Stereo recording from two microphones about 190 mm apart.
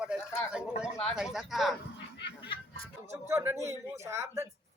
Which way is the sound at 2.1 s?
65° left (ahead or behind).